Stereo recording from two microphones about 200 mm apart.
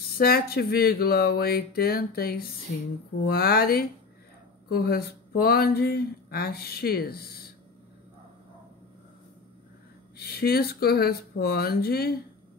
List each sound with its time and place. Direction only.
0.2 s speech: 50° left (ahead or behind)
10.1 s speech: 50° left (ahead or behind)